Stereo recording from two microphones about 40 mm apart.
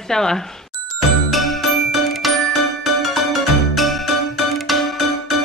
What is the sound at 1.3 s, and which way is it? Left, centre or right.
Music, centre.